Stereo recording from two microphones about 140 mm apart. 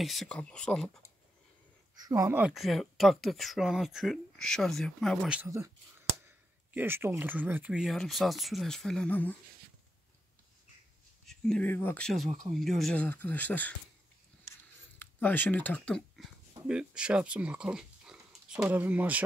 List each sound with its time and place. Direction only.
0.0 s speech: centre (ahead or behind)
2.0 s speech: 25° right (ahead or behind)
2.3 s speech: 5° right (ahead or behind)
5.3 s speech: 15° right (ahead or behind); by 9.3 s 10° left (ahead or behind)
11.2 s speech: 5° left (ahead or behind)
12.5 s speech: centre (ahead or behind)
15.0 s speech: 15° left (ahead or behind)
16.6 s speech: 5° right (ahead or behind)